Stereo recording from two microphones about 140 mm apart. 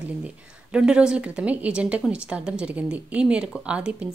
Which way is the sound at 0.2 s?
5° right (ahead or behind).